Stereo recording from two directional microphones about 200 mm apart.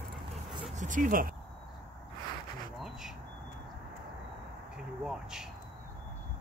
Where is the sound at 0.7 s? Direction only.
40° right (ahead or behind).